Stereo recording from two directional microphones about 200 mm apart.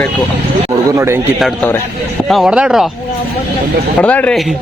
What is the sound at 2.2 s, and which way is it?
Speech, centre (ahead or behind).